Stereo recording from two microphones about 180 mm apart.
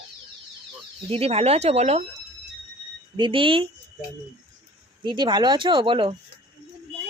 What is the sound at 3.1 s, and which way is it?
Speech, 30° right (ahead or behind).